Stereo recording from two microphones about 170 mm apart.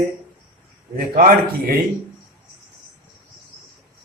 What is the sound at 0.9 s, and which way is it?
Speech, 60° right (ahead or behind).